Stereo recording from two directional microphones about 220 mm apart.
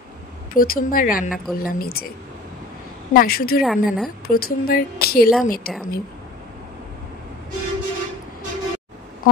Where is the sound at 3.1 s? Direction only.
45° left (ahead or behind).